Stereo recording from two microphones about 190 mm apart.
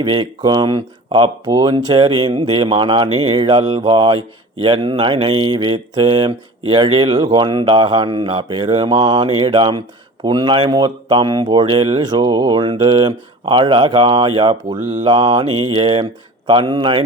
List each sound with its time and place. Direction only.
0.0 s speech: 25° right (ahead or behind)